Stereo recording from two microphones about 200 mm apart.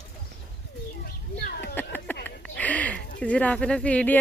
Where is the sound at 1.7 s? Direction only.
10° left (ahead or behind).